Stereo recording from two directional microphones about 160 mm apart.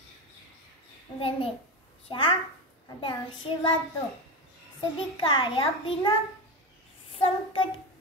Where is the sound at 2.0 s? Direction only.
30° left (ahead or behind).